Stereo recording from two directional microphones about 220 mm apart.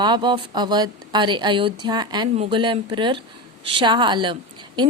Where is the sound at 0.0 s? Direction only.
20° right (ahead or behind).